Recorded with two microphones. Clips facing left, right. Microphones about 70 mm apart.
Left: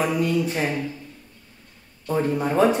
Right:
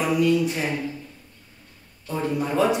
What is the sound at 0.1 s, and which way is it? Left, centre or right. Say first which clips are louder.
Speech: right 2 dB; left.